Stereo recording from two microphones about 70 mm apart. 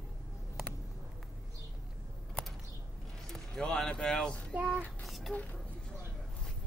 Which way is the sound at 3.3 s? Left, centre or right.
Centre.